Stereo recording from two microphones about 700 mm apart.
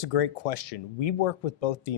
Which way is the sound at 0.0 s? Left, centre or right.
Left.